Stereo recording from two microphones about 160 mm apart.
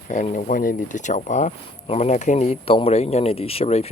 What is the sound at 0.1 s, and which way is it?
Speech, 50° left (ahead or behind).